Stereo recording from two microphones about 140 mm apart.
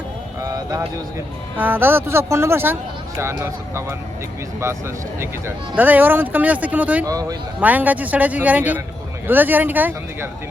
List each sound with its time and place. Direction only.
0.4 s a sound: 25° right (ahead or behind)
1.5 s speech: 15° right (ahead or behind)
5.2 s speech: 15° right (ahead or behind)
7.0 s speech: 25° right (ahead or behind)
7.6 s speech: 10° right (ahead or behind)